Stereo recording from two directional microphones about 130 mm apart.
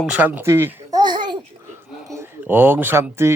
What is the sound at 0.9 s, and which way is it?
Babbling, 35° right (ahead or behind).